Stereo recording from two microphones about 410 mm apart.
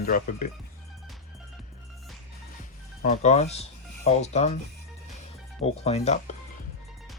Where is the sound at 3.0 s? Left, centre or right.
Centre.